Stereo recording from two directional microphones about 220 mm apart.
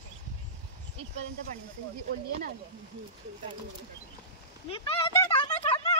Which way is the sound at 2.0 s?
45° right (ahead or behind).